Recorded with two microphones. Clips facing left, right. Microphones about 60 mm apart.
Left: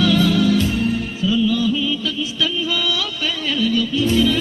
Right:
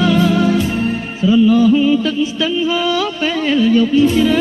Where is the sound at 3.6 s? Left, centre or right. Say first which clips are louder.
Right 7 dB; right.